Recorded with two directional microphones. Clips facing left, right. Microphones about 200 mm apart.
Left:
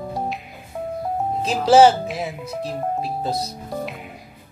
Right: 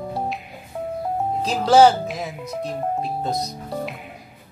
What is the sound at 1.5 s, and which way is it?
Speech, 5° left (ahead or behind).